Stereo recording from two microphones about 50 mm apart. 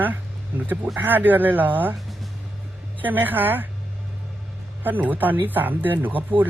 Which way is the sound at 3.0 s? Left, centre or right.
Right.